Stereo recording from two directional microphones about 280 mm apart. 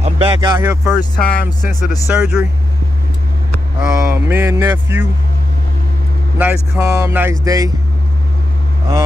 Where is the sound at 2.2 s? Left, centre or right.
Centre.